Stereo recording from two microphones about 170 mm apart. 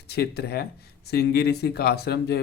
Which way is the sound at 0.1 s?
70° left (ahead or behind).